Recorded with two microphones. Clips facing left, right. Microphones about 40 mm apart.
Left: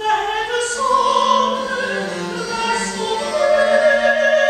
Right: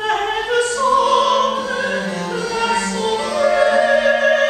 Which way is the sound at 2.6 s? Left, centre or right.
Centre.